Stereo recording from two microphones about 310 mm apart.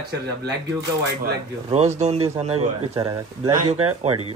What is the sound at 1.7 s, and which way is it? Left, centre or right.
Speech, right.